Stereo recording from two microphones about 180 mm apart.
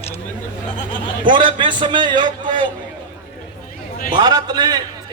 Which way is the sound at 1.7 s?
25° right (ahead or behind).